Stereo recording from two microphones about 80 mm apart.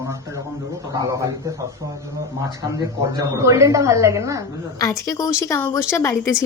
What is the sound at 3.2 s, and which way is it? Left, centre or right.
A woman's voice, right.